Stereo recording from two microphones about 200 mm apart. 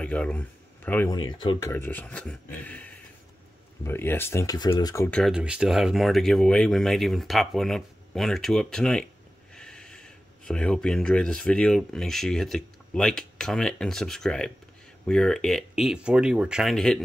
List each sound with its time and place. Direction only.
0.0 s speech: 5° left (ahead or behind)
1.1 s speech: 20° left (ahead or behind)
1.7 s speech: 10° left (ahead or behind)
5.2 s speech: 5° right (ahead or behind)